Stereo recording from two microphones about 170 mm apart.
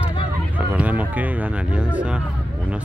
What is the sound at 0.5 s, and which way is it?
Speech, 10° right (ahead or behind).